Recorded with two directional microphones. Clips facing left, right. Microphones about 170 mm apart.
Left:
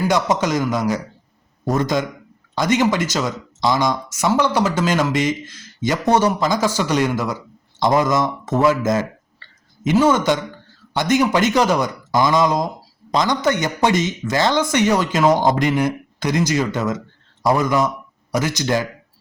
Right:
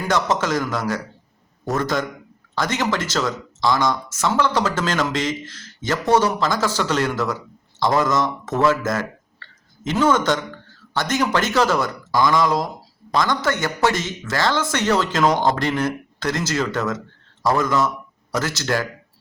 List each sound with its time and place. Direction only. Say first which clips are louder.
0.0 s speech: left 3 dB; 15° left (ahead or behind)